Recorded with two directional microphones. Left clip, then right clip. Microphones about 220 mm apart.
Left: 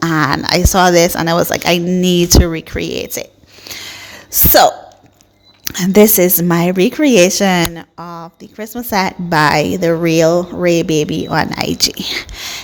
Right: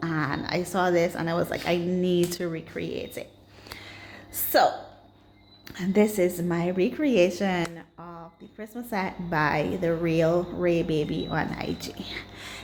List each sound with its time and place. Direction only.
0.0 s a woman's voice: 45° left (ahead or behind)
5.6 s a woman's voice: 45° left (ahead or behind)